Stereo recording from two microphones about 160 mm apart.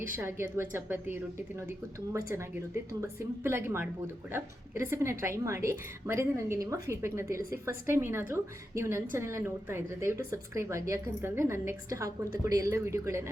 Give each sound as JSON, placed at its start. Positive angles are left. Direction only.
{"t": 0.1, "sound": "a woman's voice", "side_deg": -15}
{"t": 3.0, "sound": "a woman's voice", "side_deg": -15}